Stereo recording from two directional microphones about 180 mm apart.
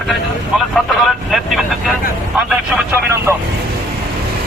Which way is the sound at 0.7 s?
Centre (ahead or behind).